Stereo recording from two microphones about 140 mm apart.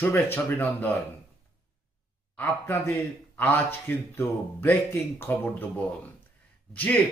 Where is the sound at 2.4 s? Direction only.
15° left (ahead or behind).